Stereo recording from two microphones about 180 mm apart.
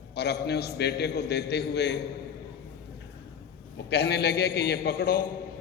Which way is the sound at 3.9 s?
65° left (ahead or behind).